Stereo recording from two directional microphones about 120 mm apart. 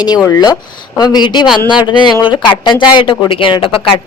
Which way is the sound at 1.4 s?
5° right (ahead or behind).